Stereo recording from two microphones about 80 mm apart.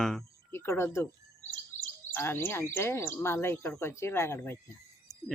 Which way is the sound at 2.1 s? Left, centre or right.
Left.